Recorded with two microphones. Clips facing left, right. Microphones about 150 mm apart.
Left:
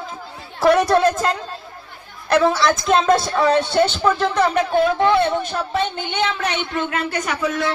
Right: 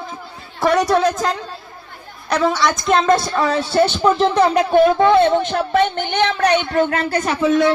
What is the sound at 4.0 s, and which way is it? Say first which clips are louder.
Speech: right 3 dB; 20° right (ahead or behind).